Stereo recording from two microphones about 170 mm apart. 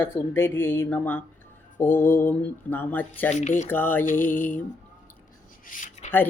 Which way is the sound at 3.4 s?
45° left (ahead or behind).